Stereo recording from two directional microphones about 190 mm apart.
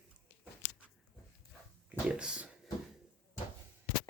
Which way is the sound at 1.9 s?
5° right (ahead or behind).